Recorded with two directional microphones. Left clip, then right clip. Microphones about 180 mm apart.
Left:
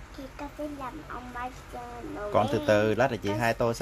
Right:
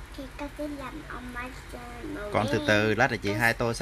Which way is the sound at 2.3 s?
Centre (ahead or behind).